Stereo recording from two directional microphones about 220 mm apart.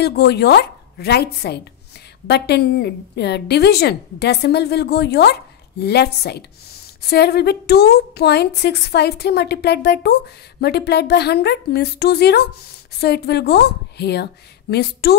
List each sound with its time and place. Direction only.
0.0 s a woman's voice: 50° left (ahead or behind)